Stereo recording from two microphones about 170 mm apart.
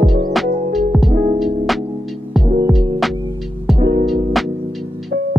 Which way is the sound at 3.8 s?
30° right (ahead or behind).